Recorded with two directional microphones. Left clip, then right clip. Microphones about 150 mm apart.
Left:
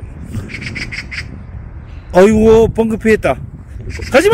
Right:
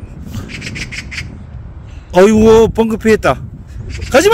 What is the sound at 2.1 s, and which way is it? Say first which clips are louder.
A man's voice: right 1 dB; 10° right (ahead or behind).